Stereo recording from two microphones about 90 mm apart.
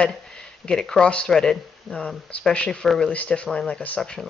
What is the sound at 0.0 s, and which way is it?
A woman's voice, 10° left (ahead or behind).